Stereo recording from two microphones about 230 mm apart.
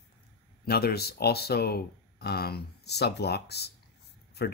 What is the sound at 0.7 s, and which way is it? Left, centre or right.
Speech, left.